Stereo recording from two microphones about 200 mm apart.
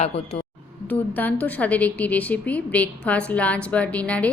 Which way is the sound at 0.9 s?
10° left (ahead or behind).